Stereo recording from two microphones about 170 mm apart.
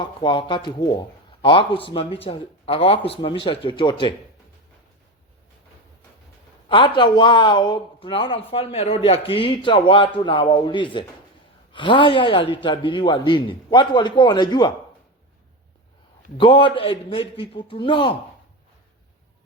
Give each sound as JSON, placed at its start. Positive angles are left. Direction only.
{"t": 0.0, "sound": "speech", "side_deg": 30}
{"t": 6.7, "sound": "speech", "side_deg": 30}
{"t": 16.4, "sound": "speech", "side_deg": 30}